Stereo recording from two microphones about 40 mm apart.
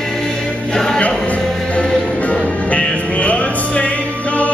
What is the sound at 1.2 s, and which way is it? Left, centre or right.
Music, left.